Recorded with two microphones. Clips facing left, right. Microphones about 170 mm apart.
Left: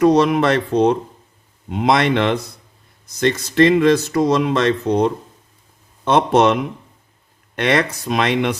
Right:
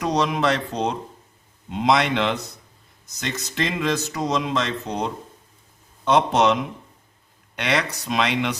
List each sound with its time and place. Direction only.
0.0 s speech: 55° left (ahead or behind)